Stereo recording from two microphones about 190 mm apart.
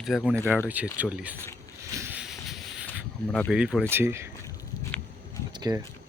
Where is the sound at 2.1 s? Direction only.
5° right (ahead or behind).